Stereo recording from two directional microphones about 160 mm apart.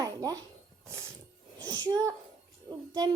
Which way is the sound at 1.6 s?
25° right (ahead or behind).